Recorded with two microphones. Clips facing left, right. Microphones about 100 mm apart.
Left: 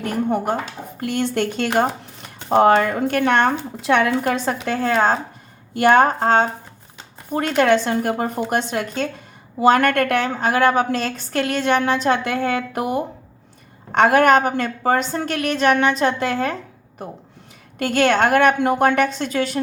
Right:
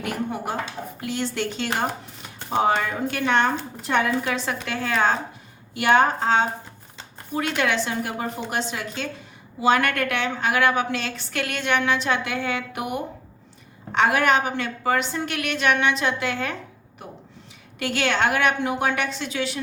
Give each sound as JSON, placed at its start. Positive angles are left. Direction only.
{"t": 0.0, "sound": "a woman's voice", "side_deg": 45}
{"t": 3.8, "sound": "a woman's voice", "side_deg": 85}
{"t": 4.2, "sound": "a woman's voice", "side_deg": 45}